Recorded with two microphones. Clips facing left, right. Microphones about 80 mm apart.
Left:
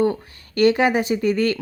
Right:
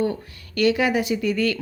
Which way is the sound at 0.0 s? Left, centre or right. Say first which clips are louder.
Left 4 dB; left.